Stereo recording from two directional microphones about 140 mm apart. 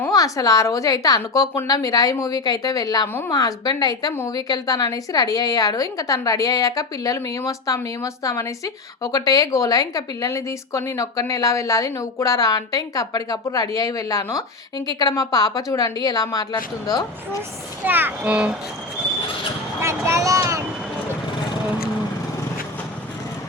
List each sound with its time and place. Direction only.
0.1 s a woman's voice: 25° left (ahead or behind)
17.8 s a child's voice: 15° right (ahead or behind)
19.8 s vehicle: 20° right (ahead or behind)